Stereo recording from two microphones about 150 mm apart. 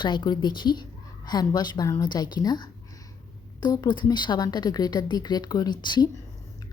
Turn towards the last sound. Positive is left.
turn(degrees=30)  # may be behind; listen again after turning